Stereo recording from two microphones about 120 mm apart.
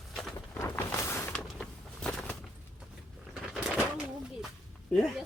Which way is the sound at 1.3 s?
5° left (ahead or behind).